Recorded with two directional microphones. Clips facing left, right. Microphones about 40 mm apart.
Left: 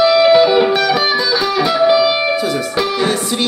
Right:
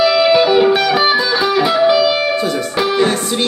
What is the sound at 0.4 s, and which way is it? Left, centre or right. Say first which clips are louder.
Music: even; right.